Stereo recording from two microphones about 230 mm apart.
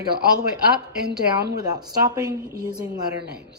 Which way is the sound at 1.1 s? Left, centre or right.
Right.